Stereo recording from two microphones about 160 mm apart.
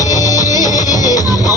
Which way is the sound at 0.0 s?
20° left (ahead or behind).